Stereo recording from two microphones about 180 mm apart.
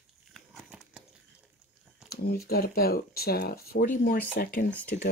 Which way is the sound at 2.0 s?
60° left (ahead or behind).